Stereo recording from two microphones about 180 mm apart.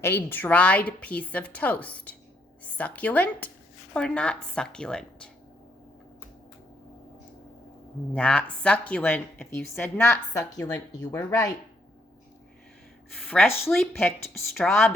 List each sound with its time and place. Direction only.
0.0 s a woman's voice: 10° left (ahead or behind)
8.1 s a woman's voice: 5° left (ahead or behind)
13.1 s a woman's voice: centre (ahead or behind)